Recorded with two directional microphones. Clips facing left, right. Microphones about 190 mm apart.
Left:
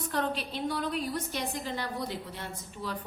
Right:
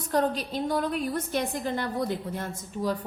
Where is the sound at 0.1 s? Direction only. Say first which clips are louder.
Right 7 dB; 40° right (ahead or behind).